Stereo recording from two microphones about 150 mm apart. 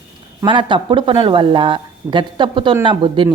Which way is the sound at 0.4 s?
30° right (ahead or behind).